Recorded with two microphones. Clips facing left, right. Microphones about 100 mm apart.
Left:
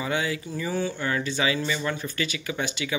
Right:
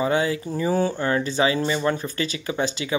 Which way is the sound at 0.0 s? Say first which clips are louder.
Right 6 dB; 30° right (ahead or behind).